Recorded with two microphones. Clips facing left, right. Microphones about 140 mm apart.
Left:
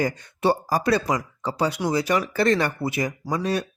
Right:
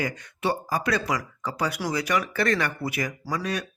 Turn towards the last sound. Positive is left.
turn(degrees=30)  # may be behind; listen again after turning